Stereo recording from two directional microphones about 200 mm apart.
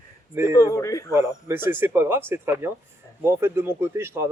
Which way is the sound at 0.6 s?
15° left (ahead or behind).